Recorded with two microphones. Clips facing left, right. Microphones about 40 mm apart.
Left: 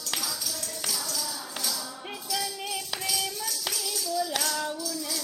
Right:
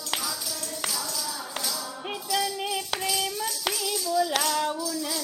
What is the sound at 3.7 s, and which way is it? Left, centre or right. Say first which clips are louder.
Clapping: right 4 dB; right.